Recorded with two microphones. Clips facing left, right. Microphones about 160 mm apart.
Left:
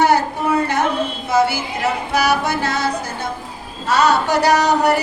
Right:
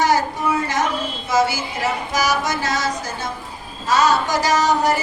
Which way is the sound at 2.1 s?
60° left (ahead or behind).